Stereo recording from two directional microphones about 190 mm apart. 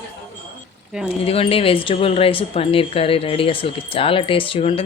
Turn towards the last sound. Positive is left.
turn(degrees=30)  # may be behind; listen again after turning